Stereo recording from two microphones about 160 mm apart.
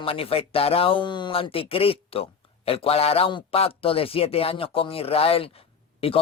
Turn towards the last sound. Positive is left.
turn(degrees=35)  # may be behind; listen again after turning